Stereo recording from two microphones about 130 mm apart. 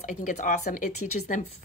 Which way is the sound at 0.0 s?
65° left (ahead or behind).